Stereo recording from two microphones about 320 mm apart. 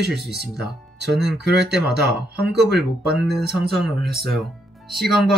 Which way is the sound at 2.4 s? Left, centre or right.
Right.